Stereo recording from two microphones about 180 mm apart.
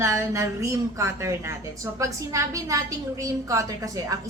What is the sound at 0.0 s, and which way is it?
A woman's voice, 15° right (ahead or behind).